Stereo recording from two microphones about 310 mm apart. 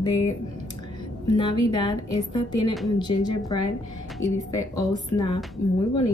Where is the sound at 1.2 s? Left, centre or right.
Centre.